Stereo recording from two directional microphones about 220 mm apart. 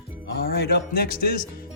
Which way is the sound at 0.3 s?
45° left (ahead or behind).